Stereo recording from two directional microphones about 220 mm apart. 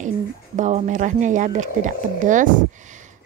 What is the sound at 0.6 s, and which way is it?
A woman's voice, 35° right (ahead or behind).